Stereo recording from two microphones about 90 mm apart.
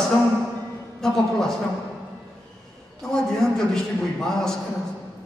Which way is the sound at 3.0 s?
5° left (ahead or behind).